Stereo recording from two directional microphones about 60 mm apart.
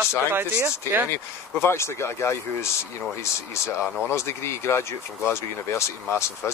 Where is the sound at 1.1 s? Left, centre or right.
Left.